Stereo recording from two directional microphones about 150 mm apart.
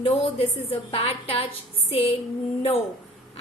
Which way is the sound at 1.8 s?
40° left (ahead or behind).